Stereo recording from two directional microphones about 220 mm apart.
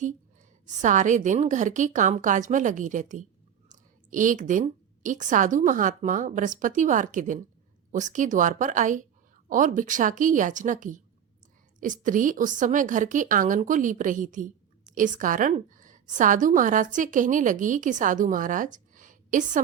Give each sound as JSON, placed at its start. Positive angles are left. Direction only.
{"t": 0.8, "sound": "a woman's voice", "side_deg": -35}